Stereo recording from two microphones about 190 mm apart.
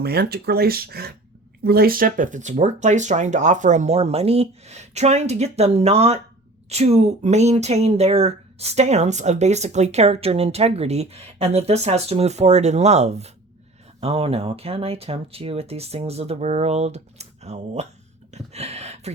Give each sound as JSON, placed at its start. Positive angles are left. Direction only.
{"t": 0.0, "sound": "speech", "side_deg": -55}